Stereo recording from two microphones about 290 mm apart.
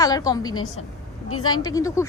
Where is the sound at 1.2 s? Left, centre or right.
Left.